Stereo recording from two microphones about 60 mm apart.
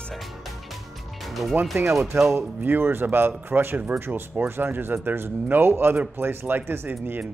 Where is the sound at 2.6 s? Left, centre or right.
Right.